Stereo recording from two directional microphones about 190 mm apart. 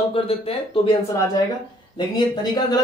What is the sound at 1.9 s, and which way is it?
Speech, 20° left (ahead or behind).